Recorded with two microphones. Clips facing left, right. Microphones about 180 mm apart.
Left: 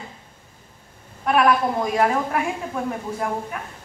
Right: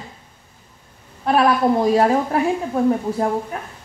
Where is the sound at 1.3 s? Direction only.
30° right (ahead or behind).